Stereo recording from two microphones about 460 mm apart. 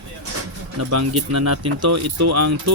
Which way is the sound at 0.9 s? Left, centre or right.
Right.